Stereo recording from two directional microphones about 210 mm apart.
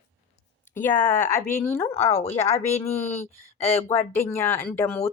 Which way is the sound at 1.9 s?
30° left (ahead or behind).